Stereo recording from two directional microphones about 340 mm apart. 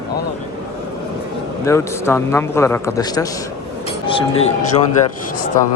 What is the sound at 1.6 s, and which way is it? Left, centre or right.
Speech, centre.